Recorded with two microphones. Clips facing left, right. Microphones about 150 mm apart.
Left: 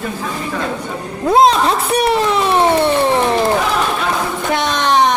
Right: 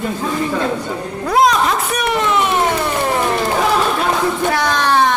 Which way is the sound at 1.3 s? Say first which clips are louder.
Left 3 dB; 30° left (ahead or behind).